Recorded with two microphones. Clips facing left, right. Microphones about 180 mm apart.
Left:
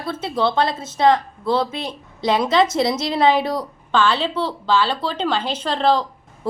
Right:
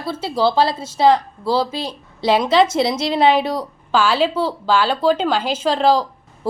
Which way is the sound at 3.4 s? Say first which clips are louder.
Right 1 dB; centre (ahead or behind).